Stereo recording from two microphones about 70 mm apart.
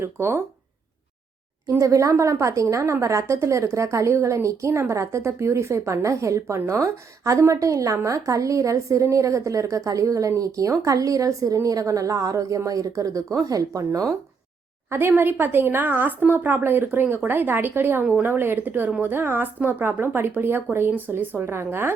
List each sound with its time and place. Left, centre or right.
0.0 s a woman's voice: right
1.8 s a woman's voice: right
14.8 s a woman's voice: right